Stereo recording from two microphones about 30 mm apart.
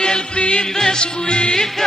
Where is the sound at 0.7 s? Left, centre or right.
Left.